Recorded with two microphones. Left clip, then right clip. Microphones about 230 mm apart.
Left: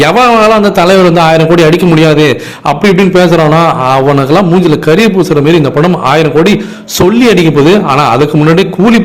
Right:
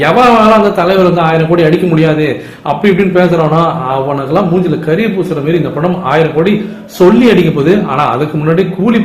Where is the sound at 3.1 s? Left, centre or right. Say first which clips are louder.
Left 4 dB; left.